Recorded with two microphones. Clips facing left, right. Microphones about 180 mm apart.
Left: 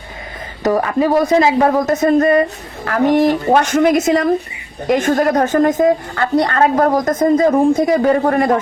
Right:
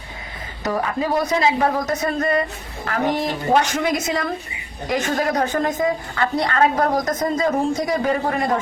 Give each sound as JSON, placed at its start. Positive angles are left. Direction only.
{"t": 0.6, "sound": "a woman's voice", "side_deg": 50}
{"t": 7.3, "sound": "a man's voice", "side_deg": 55}